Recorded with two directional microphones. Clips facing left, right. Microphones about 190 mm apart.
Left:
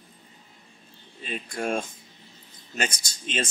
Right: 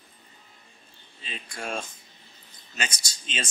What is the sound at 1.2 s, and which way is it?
Speech, 50° left (ahead or behind).